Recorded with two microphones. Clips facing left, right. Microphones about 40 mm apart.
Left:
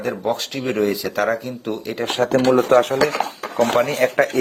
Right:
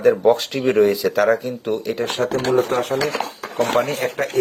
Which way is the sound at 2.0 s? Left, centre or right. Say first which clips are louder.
Left 5 dB; left.